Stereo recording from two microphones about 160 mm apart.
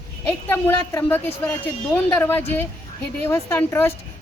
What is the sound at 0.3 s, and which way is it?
A woman's voice, 15° left (ahead or behind).